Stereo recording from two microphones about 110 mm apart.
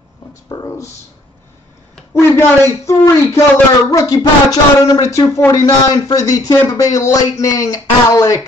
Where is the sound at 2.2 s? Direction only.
25° left (ahead or behind).